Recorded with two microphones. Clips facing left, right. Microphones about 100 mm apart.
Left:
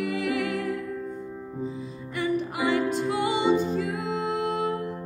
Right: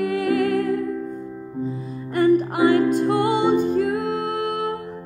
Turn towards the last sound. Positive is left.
turn(degrees=-55)  # may be behind; listen again after turning